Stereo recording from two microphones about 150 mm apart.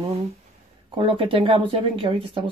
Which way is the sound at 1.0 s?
35° right (ahead or behind).